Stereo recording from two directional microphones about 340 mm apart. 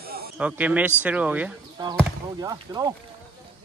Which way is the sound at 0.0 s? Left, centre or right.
Right.